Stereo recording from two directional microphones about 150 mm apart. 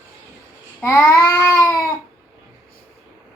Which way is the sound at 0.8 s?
15° left (ahead or behind).